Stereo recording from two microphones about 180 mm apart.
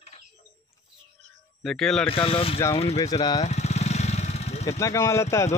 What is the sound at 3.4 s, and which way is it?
Vehicle, 40° left (ahead or behind).